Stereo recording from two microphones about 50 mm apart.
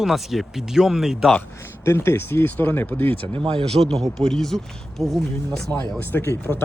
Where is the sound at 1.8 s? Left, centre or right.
Left.